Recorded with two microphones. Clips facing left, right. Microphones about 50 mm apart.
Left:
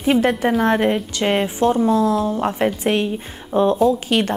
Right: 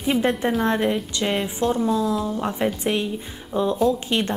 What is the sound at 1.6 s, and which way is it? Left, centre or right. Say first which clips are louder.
Speech: left 5 dB; centre.